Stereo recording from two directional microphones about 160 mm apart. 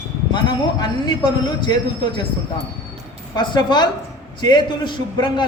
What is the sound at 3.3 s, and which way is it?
A woman's voice, 25° left (ahead or behind).